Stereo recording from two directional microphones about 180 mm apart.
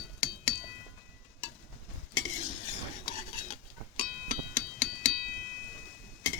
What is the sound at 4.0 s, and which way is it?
Music, 45° left (ahead or behind).